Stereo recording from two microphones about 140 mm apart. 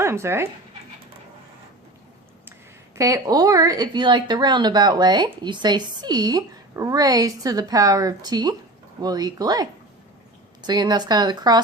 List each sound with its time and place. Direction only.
0.0 s speech: 20° right (ahead or behind)
2.9 s speech: 25° right (ahead or behind)